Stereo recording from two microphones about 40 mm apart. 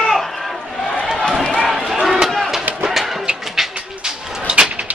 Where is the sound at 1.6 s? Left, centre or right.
Centre.